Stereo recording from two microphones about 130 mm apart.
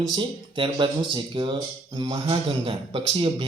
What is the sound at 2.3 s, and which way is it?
A man's voice, 45° right (ahead or behind).